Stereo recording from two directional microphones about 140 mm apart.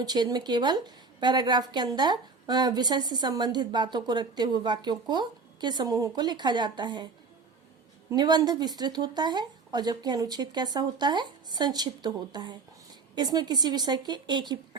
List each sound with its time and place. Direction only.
0.0 s a woman's voice: 30° right (ahead or behind)
8.1 s a woman's voice: 30° right (ahead or behind)